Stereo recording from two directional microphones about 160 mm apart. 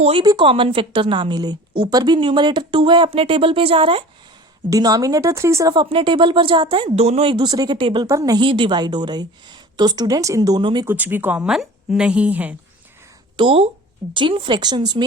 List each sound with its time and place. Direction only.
0.0 s a woman's voice: 35° right (ahead or behind)
4.7 s speech: 25° right (ahead or behind)
10.8 s a woman's voice: 10° right (ahead or behind)
13.3 s a woman's voice: 35° right (ahead or behind)